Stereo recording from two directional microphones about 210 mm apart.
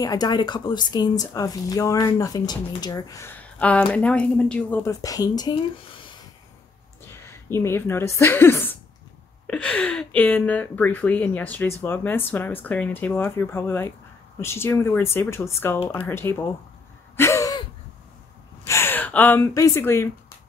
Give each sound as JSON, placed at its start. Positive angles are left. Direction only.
{"t": 0.0, "sound": "speech", "side_deg": 20}
{"t": 7.2, "sound": "speech", "side_deg": 10}
{"t": 17.2, "sound": "gasp", "side_deg": 15}
{"t": 18.7, "sound": "speech", "side_deg": 10}